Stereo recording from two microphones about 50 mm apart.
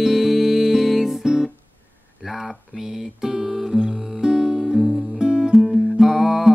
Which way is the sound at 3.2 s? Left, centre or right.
Centre.